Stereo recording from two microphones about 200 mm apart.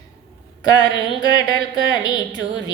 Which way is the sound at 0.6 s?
20° left (ahead or behind).